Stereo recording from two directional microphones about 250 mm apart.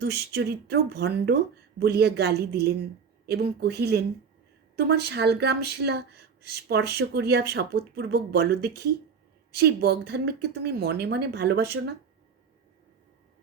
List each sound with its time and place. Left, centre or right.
0.0 s speech: right